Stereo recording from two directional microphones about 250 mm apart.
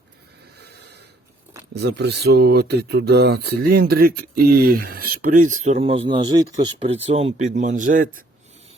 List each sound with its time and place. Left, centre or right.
1.7 s speech: right